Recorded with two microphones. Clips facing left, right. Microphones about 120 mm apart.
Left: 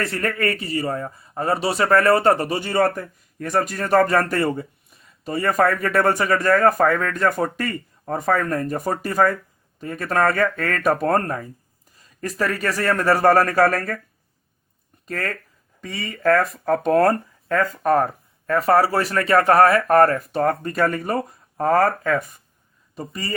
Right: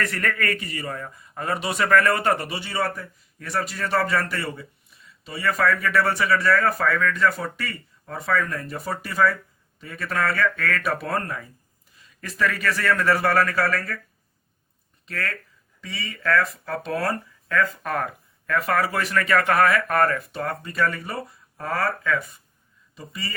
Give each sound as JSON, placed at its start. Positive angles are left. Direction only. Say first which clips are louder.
{"t": 0.0, "sound": "speech", "louder": "left 3 dB", "side_deg": 30}
{"t": 15.0, "sound": "speech", "louder": "left 4 dB", "side_deg": 40}